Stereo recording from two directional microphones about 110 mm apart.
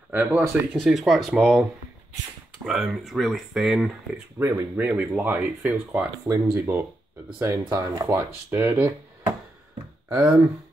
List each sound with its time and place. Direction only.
0.1 s speech: 15° right (ahead or behind)
0.8 s speech: centre (ahead or behind)
4.4 s speech: 20° right (ahead or behind)
6.5 s speech: 25° right (ahead or behind)
8.5 s speech: 15° right (ahead or behind)